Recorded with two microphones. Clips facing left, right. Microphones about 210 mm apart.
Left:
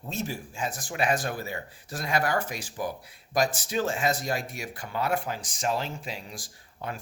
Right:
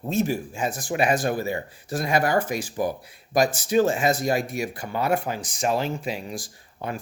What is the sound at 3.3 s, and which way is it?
Speech, centre (ahead or behind).